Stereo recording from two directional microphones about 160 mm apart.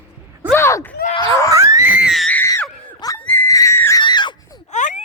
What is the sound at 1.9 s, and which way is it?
Screaming, 5° right (ahead or behind).